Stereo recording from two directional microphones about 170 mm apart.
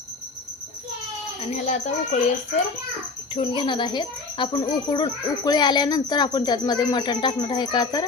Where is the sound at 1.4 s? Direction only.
40° left (ahead or behind).